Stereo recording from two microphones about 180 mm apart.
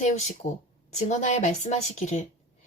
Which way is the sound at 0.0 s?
35° left (ahead or behind).